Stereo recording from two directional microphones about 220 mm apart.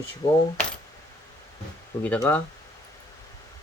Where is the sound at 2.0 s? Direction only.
10° left (ahead or behind).